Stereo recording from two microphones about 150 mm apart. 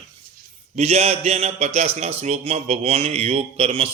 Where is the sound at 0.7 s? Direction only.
45° right (ahead or behind).